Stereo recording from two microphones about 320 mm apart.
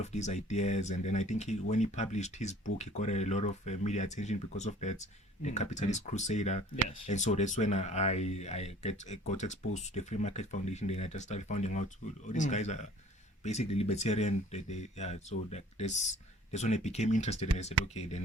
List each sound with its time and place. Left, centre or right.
0.0 s speech: left
17.8 s speech: right